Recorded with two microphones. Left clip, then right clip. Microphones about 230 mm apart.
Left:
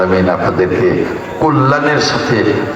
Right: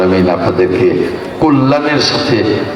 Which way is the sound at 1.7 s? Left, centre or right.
Right.